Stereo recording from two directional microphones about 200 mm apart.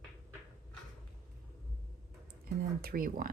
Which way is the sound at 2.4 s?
50° right (ahead or behind).